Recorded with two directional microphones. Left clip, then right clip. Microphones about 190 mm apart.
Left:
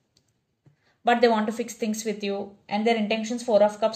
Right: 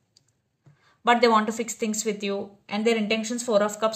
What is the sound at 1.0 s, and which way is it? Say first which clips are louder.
A woman's voice: right 1 dB; 40° right (ahead or behind).